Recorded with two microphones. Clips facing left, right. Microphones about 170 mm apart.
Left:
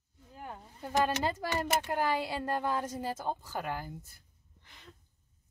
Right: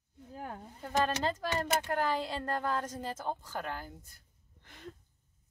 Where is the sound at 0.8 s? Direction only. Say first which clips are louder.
Left 1 dB; 10° left (ahead or behind).